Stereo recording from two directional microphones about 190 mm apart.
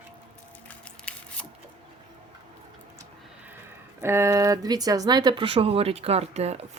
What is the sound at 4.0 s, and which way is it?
Speech, 15° right (ahead or behind).